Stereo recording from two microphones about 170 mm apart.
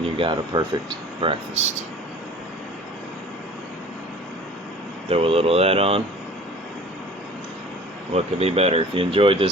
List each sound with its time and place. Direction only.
0.0 s speech: 30° right (ahead or behind)
5.0 s speech: 35° right (ahead or behind)
8.1 s speech: 35° right (ahead or behind)